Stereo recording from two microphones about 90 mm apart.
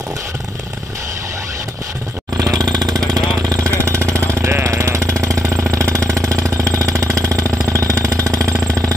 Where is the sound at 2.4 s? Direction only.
45° right (ahead or behind).